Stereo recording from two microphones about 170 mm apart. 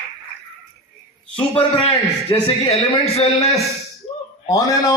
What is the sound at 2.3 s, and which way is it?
Speech, 30° left (ahead or behind).